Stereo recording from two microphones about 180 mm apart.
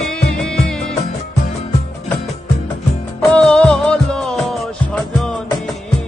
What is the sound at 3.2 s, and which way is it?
Music, 5° left (ahead or behind).